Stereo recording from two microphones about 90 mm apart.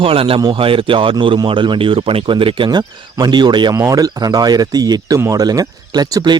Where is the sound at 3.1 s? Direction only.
50° right (ahead or behind).